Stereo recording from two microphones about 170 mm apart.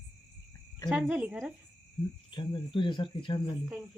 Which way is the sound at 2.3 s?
25° left (ahead or behind).